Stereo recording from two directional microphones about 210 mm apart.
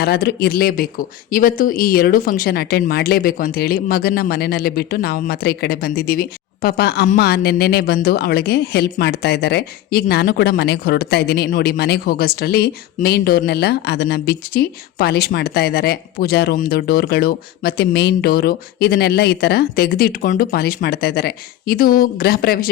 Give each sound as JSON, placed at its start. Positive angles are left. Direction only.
{"t": 0.0, "sound": "a woman's voice", "side_deg": 50}